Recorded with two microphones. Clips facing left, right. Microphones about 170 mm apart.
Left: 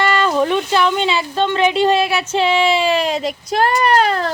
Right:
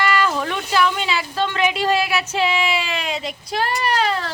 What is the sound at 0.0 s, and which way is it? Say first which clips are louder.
Speech: left 4 dB; 30° left (ahead or behind).